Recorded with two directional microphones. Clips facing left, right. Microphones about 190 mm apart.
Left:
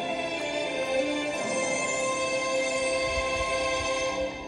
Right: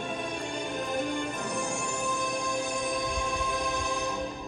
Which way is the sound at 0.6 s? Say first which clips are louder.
Left 5 dB; 20° left (ahead or behind).